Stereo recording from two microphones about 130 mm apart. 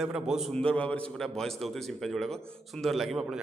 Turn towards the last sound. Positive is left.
turn(degrees=0)  # may be behind; listen again after turning